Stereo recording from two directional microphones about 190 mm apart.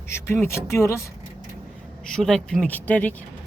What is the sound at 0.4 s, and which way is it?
Speech, 15° left (ahead or behind).